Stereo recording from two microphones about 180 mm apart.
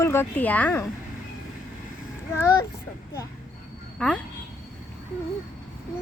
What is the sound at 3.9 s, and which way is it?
Speech, 5° left (ahead or behind).